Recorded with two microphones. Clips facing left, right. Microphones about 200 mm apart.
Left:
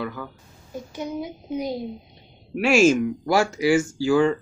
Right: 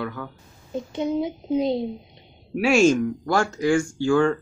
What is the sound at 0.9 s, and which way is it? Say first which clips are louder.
Speech: right 6 dB; 25° right (ahead or behind).